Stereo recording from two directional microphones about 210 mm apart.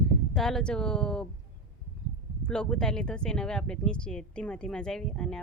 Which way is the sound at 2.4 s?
5° left (ahead or behind).